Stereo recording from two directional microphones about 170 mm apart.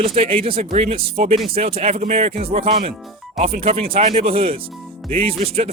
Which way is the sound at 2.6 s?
35° right (ahead or behind).